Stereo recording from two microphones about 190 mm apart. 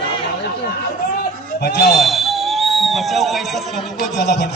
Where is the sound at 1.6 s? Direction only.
60° left (ahead or behind).